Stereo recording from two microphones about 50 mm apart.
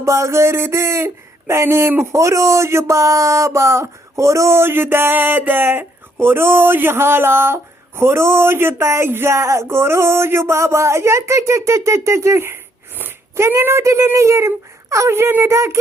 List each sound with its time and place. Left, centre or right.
0.0 s speech: right
2.1 s speech: right